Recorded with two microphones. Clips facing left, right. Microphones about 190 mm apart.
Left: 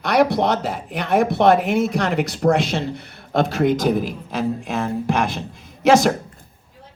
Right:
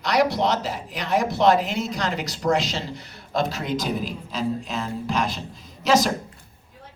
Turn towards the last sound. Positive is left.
turn(degrees=55)  # may be behind; listen again after turning